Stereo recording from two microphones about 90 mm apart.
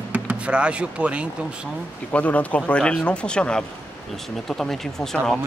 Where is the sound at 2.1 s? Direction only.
15° left (ahead or behind).